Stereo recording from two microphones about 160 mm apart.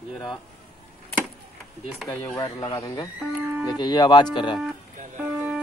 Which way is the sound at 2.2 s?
20° left (ahead or behind).